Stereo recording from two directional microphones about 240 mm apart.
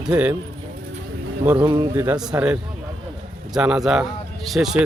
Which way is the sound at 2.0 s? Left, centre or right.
Centre.